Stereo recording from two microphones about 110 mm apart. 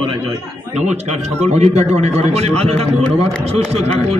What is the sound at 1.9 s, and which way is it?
Speech, 80° right.